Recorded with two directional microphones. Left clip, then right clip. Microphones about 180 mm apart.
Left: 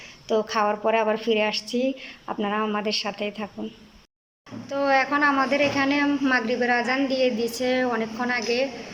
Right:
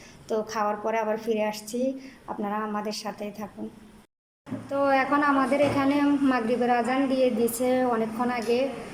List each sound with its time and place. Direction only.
0.3 s a woman's voice: centre (ahead or behind)
4.7 s a man's voice: 10° right (ahead or behind)